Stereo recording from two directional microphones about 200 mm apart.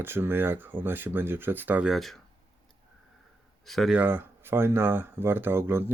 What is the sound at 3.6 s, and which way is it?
Speech, centre (ahead or behind).